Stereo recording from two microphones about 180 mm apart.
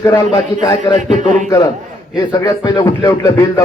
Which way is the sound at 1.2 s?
45° right (ahead or behind).